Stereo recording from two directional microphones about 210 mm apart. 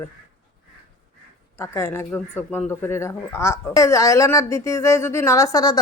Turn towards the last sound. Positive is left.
turn(degrees=20)  # may be behind; listen again after turning